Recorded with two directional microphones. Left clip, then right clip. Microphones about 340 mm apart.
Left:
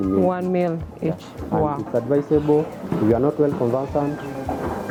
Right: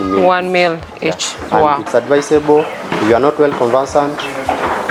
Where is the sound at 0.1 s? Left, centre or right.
Centre.